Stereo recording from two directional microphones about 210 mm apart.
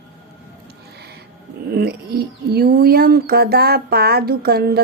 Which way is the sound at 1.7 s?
50° right (ahead or behind).